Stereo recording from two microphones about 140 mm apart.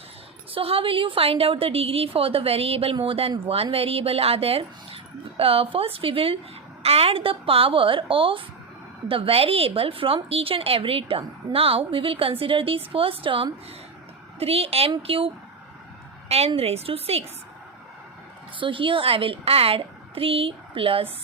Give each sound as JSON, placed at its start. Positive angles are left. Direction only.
{"t": 0.5, "sound": "a woman's voice", "side_deg": -40}
{"t": 16.6, "sound": "a woman's voice", "side_deg": -45}
{"t": 18.6, "sound": "a woman's voice", "side_deg": -35}